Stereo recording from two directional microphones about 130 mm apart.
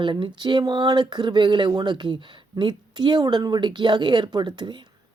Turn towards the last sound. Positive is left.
turn(degrees=-35)  # may be behind; listen again after turning